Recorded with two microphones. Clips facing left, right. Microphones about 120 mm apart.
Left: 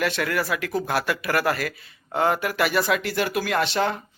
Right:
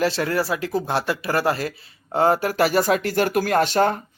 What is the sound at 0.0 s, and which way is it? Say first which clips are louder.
Speech: right 3 dB; 30° right (ahead or behind).